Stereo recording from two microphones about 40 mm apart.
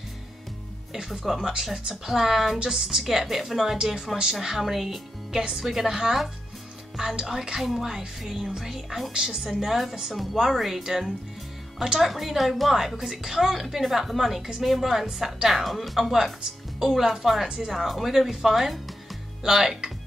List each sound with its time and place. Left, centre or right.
0.9 s speech: centre
9.7 s speech: centre
12.0 s speech: centre
12.9 s speech: centre